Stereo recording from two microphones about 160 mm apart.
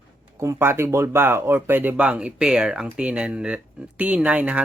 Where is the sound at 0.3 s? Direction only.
15° right (ahead or behind).